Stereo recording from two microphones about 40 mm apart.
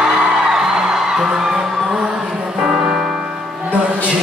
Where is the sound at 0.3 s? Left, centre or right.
Centre.